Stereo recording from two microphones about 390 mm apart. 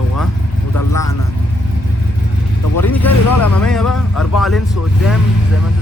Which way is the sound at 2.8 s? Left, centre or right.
Centre.